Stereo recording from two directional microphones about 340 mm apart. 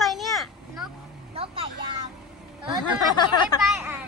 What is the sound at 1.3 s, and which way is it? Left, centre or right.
Vehicle, centre.